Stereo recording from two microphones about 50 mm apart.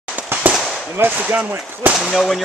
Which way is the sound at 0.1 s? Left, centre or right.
Right.